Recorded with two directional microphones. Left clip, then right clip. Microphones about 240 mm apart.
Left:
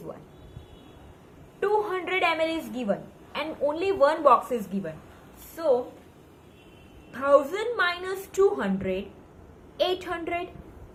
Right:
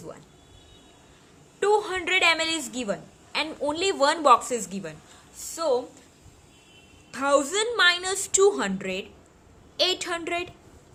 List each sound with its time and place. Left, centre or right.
1.5 s a woman's voice: right
7.1 s a woman's voice: right